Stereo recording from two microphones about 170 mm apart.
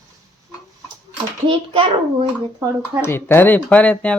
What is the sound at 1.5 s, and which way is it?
Speech, 30° right (ahead or behind).